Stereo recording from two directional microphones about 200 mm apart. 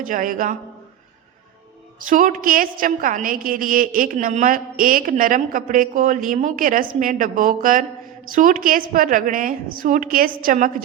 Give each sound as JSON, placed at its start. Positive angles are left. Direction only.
{"t": 0.0, "sound": "a man's voice", "side_deg": -40}
{"t": 2.0, "sound": "a woman's voice", "side_deg": -40}